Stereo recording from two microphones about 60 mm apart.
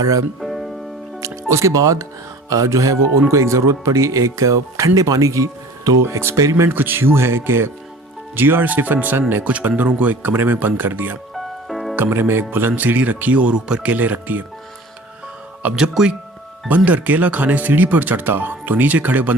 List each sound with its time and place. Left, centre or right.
0.0 s music: right
0.3 s music: centre
1.2 s speech: right
2.5 s music: right
3.2 s speech: right
6.0 s speech: right
6.7 s speech: right
11.3 s music: centre
11.9 s speech: right; by 13.9 s centre
13.9 s speech: right
15.7 s speech: centre
16.6 s speech: right